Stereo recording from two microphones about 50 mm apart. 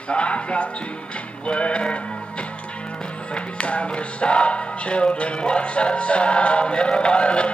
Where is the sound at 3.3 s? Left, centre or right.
Left.